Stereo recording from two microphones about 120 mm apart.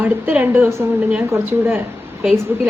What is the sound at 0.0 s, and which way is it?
A woman's voice, 15° right (ahead or behind).